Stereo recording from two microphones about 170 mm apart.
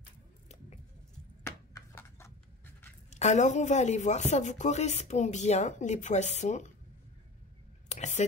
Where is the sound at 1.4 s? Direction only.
15° left (ahead or behind).